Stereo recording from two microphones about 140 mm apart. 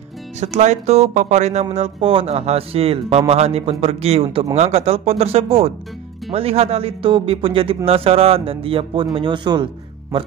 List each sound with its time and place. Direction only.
0.4 s a man's voice: 55° right (ahead or behind); by 9.7 s 35° right (ahead or behind)